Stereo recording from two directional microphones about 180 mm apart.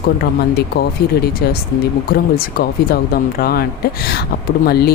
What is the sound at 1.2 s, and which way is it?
Speech, 60° left (ahead or behind).